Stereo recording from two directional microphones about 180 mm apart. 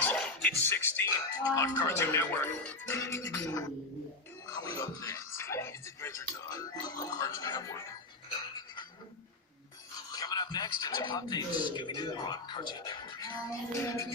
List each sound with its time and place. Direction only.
0.0 s speech: 5° left (ahead or behind)
4.4 s music: 20° left (ahead or behind)
4.8 s speech: 20° left (ahead or behind)
8.5 s dishes: 25° left (ahead or behind)
10.1 s speech: 20° left (ahead or behind)